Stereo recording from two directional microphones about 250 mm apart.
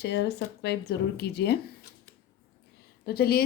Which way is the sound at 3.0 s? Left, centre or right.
Left.